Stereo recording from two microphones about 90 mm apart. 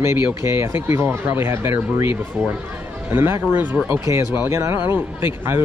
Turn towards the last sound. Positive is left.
turn(degrees=-25)  # may be behind; listen again after turning